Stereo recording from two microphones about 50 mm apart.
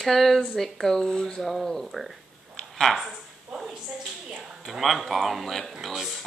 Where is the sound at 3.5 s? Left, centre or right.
Centre.